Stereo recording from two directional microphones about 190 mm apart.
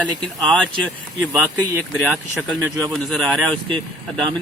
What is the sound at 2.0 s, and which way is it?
Speech, 5° left (ahead or behind).